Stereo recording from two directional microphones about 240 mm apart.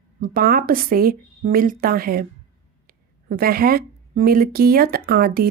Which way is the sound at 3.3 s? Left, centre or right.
Right.